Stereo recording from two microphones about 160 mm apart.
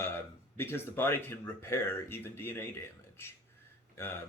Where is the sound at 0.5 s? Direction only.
15° left (ahead or behind).